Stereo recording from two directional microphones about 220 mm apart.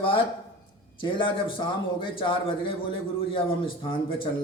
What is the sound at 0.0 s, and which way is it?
A man's voice, 25° left (ahead or behind).